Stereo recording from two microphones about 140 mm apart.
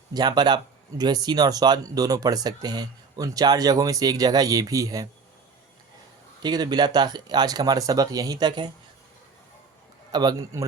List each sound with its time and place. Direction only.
0.1 s speech: 30° right (ahead or behind)
6.4 s speech: 30° right (ahead or behind)
10.1 s speech: 30° right (ahead or behind)